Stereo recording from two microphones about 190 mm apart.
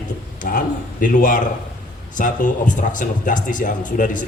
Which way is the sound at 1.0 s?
45° left (ahead or behind).